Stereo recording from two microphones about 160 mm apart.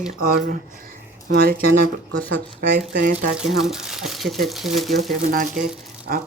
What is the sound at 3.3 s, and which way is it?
Speech, 5° right (ahead or behind).